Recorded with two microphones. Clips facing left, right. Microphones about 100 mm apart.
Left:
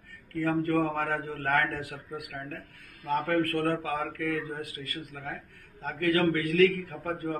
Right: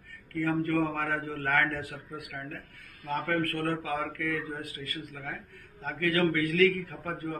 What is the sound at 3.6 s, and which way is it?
Speech, 40° left (ahead or behind).